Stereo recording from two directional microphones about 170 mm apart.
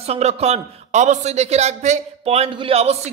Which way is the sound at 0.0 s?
40° right (ahead or behind).